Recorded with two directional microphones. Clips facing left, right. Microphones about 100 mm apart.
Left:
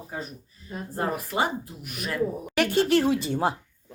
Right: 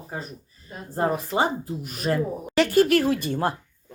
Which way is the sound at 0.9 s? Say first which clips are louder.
Right 4 dB; 30° right (ahead or behind).